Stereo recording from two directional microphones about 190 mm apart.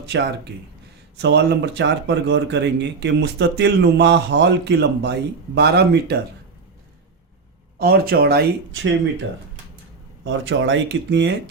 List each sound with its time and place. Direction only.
0.0 s speech: 65° right (ahead or behind)
7.8 s speech: 55° right (ahead or behind); by 8.9 s 70° right (ahead or behind)
10.2 s speech: 80° right